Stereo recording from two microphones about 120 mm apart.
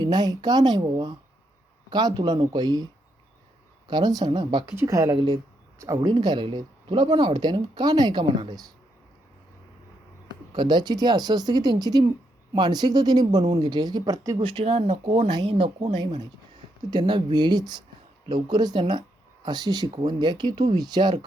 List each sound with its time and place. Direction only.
0.0 s speech: 35° right (ahead or behind)
4.7 s speech: 25° right (ahead or behind)
5.1 s speech: 40° right (ahead or behind)
5.8 s speech: 25° right (ahead or behind)
6.1 s speech: 40° right (ahead or behind)
10.5 s speech: 40° right (ahead or behind)
14.3 s speech: 50° right (ahead or behind)
16.9 s speech: 40° right (ahead or behind)